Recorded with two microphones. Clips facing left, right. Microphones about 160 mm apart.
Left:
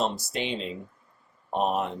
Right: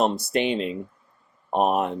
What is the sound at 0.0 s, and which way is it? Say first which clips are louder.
Speech: right 7 dB; 60° right (ahead or behind).